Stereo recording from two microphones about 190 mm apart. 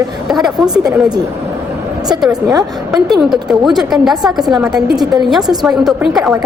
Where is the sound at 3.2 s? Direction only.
Centre (ahead or behind).